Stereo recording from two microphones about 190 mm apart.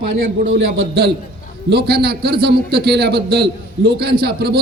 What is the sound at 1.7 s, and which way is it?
A man's voice, 60° right (ahead or behind).